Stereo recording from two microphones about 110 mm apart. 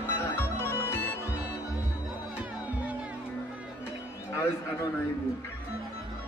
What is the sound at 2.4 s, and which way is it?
Music, 10° right (ahead or behind).